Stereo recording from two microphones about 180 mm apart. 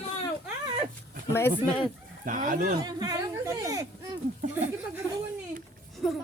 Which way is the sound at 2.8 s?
20° right (ahead or behind).